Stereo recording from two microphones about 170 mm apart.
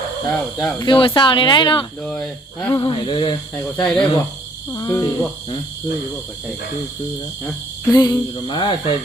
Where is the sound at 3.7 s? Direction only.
5° left (ahead or behind).